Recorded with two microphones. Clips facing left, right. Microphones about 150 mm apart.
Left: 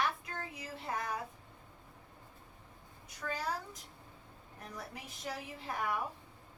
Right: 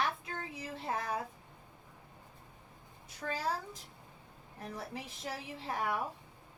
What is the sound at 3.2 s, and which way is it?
Speech, 30° right (ahead or behind).